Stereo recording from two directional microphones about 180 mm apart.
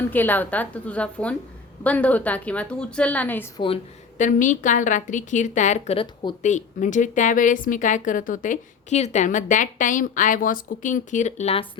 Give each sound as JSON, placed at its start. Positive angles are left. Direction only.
{"t": 0.1, "sound": "a woman's voice", "side_deg": 10}
{"t": 4.2, "sound": "a woman's voice", "side_deg": 45}